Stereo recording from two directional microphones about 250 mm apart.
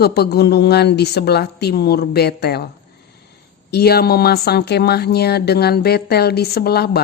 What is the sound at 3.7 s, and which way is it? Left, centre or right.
Speech, left.